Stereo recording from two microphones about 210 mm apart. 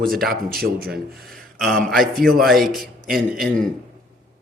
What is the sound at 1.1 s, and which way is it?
A man's voice, centre (ahead or behind).